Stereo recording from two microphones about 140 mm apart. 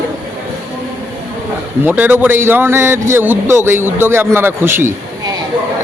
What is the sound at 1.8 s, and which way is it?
A man's voice, 15° right (ahead or behind).